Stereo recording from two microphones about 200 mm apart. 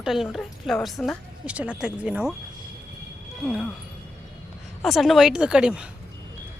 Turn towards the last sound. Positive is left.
turn(degrees=-5)  # may be behind; listen again after turning